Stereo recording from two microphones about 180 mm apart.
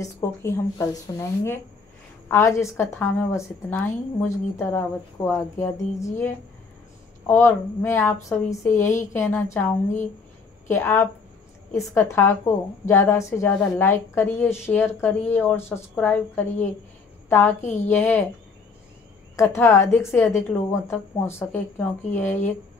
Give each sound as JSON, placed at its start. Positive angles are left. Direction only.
{"t": 0.0, "sound": "a woman's voice", "side_deg": 15}
{"t": 17.6, "sound": "a woman's voice", "side_deg": 40}
{"t": 17.8, "sound": "a woman's voice", "side_deg": 10}
{"t": 19.3, "sound": "a woman's voice", "side_deg": 15}